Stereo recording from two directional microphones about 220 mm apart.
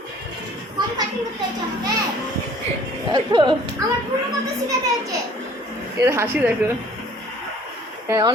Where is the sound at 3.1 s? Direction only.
20° right (ahead or behind).